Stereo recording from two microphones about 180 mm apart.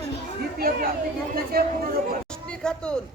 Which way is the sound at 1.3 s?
55° right (ahead or behind).